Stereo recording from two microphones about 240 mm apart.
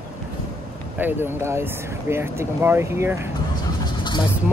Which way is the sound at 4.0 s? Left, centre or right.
Centre.